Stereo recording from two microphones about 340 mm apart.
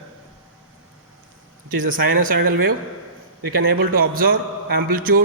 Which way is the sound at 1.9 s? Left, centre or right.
Right.